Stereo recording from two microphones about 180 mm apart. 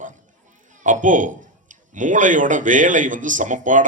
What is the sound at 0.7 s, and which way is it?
Speech, 45° right (ahead or behind).